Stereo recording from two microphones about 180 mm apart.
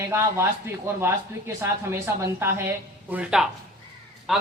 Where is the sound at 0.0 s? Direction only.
15° right (ahead or behind).